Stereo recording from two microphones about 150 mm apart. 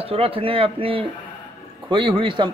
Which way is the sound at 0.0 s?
40° right (ahead or behind).